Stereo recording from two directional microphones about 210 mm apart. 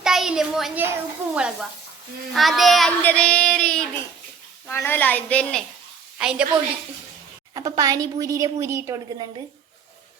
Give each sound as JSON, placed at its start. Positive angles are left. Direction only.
{"t": 0.0, "sound": "a child's voice", "side_deg": 0}
{"t": 1.3, "sound": "child singing", "side_deg": -5}
{"t": 4.6, "sound": "a woman's voice", "side_deg": 10}
{"t": 6.1, "sound": "child singing", "side_deg": -5}
{"t": 7.5, "sound": "a woman's voice", "side_deg": -15}